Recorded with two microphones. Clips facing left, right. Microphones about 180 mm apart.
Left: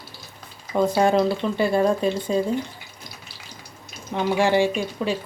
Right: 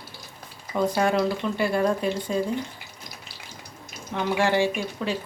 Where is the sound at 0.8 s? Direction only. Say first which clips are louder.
Left 3 dB; 25° left (ahead or behind).